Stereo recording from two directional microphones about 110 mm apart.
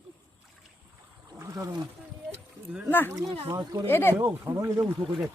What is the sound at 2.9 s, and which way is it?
Speech, 20° left (ahead or behind).